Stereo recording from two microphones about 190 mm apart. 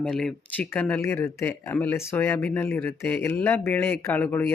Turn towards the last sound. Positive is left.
turn(degrees=10)  # may be behind; listen again after turning